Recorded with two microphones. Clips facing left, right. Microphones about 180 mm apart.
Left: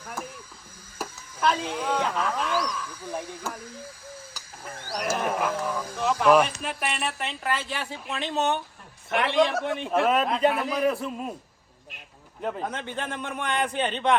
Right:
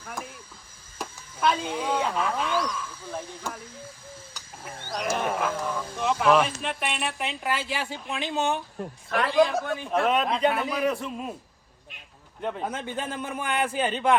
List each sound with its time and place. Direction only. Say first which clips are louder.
0.9 s speech: left 1 dB; centre (ahead or behind)
4.4 s speech: even; centre (ahead or behind)
9.0 s a man's voice: left 1 dB; 25° left (ahead or behind)
9.3 s speech: right 2 dB; centre (ahead or behind)
12.4 s a man's voice: even; centre (ahead or behind)